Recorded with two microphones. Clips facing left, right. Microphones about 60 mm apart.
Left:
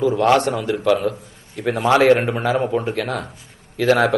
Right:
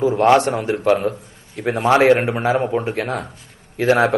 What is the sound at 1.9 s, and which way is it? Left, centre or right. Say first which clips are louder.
Speech: right 1 dB; right.